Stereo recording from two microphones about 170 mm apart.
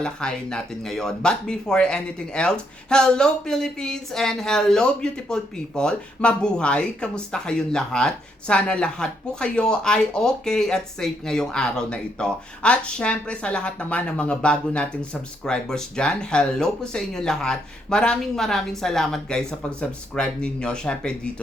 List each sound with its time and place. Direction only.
0.0 s speech: 5° left (ahead or behind)